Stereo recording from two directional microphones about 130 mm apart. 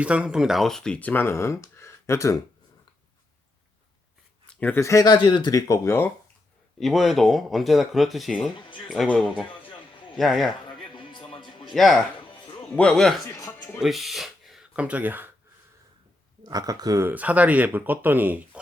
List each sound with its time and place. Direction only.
0.0 s speech: 10° right (ahead or behind); by 2.4 s 25° left (ahead or behind)
4.4 s speech: 15° left (ahead or behind)
6.7 s a man's voice: centre (ahead or behind)
10.9 s music: 40° left (ahead or behind)
11.7 s speech: centre (ahead or behind); by 15.3 s 15° right (ahead or behind)
16.4 s speech: 30° right (ahead or behind); by 18.6 s 15° right (ahead or behind)